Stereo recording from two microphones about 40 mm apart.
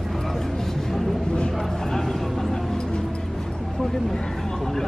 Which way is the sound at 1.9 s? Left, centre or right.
Centre.